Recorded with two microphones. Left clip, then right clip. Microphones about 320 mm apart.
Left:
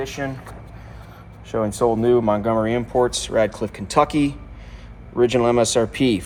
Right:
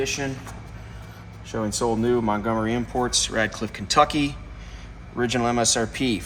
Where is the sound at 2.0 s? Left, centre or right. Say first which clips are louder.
Left 5 dB; left.